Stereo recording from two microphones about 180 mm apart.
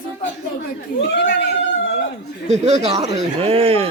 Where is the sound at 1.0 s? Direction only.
85° left.